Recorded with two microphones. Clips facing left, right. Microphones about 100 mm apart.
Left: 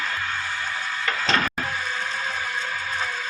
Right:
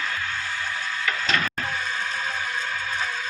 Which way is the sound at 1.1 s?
30° left (ahead or behind).